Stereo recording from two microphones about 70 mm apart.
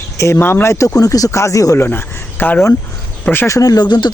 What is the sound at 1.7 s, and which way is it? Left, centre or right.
Speech, left.